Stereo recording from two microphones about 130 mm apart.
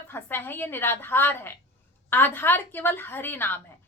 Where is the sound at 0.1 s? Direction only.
15° left (ahead or behind).